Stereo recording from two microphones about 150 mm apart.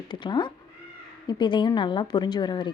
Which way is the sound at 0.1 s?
30° left (ahead or behind).